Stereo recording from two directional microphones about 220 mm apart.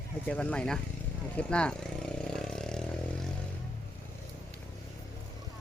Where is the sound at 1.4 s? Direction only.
5° left (ahead or behind).